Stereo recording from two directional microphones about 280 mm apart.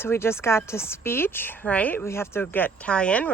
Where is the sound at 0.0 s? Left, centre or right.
Centre.